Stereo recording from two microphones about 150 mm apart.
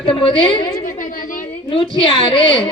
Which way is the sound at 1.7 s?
35° left (ahead or behind).